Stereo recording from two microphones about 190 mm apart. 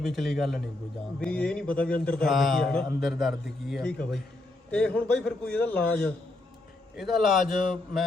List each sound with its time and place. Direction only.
0.0 s a man's voice: centre (ahead or behind)